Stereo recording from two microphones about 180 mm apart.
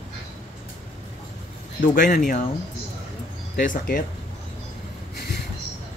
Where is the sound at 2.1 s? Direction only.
50° left (ahead or behind).